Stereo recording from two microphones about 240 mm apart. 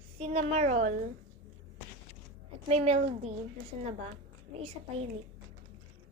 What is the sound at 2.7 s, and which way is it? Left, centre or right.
Speech, right.